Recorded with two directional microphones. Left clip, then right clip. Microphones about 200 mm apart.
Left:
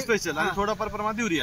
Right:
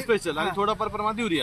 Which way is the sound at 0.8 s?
10° left (ahead or behind).